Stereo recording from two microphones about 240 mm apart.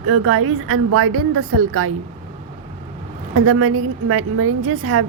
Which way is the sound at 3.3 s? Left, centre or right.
Right.